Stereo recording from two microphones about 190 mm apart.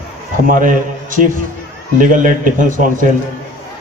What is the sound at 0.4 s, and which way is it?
A man's voice, 45° right (ahead or behind).